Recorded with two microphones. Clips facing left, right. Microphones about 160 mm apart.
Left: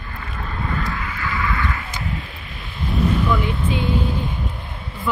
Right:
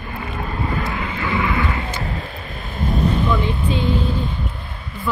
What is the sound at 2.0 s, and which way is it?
Vehicle, 40° right (ahead or behind).